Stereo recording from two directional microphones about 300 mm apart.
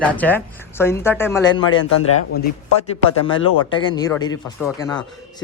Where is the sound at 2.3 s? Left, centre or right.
Left.